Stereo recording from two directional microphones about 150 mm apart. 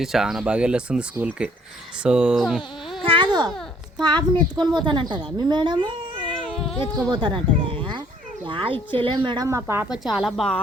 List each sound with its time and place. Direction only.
0.0 s speech: centre (ahead or behind)
3.1 s babbling: 30° right (ahead or behind)
4.0 s a woman's voice: 30° right (ahead or behind)
7.1 s speech: 30° right (ahead or behind)
7.6 s a sound: 35° right (ahead or behind)
8.4 s speech: 35° right (ahead or behind)
9.5 s speech: 20° right (ahead or behind)
9.9 s a woman's voice: 5° right (ahead or behind)